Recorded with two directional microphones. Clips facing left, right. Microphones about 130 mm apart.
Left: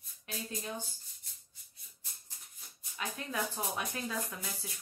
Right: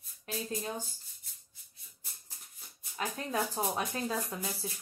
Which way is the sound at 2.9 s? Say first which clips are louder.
Right 4 dB; 40° right (ahead or behind).